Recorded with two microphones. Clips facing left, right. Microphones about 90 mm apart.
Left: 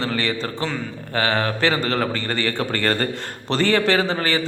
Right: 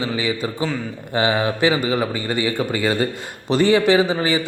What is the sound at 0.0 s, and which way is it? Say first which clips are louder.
A man's voice: right 1 dB; 10° right (ahead or behind).